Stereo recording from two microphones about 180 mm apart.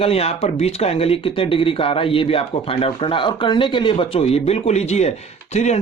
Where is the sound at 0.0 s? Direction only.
35° left (ahead or behind).